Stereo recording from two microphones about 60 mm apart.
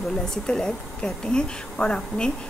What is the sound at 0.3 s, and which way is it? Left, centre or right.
A woman's voice, centre.